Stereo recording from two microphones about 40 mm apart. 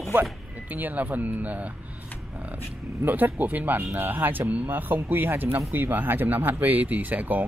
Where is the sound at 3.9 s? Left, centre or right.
Right.